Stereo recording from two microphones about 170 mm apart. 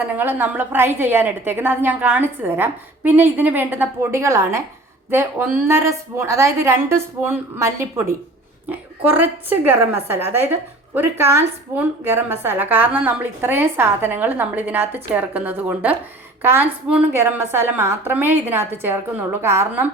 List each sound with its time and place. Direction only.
0.0 s a woman's voice: 10° right (ahead or behind)